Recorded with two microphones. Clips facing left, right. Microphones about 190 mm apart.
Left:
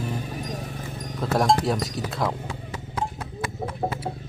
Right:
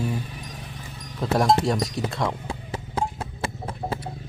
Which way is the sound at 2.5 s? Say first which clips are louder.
Right 3 dB; 30° right (ahead or behind).